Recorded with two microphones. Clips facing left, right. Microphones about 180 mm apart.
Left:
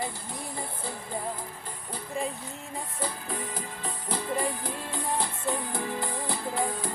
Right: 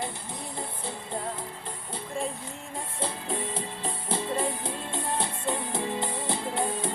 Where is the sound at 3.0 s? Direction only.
25° right (ahead or behind).